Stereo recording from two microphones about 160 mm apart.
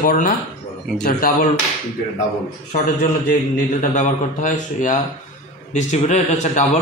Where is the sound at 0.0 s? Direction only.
60° left (ahead or behind).